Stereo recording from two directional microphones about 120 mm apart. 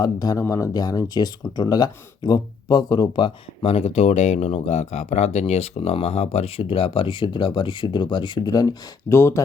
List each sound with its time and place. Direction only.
0.0 s speech: 30° left (ahead or behind)
9.0 s speech: 20° left (ahead or behind)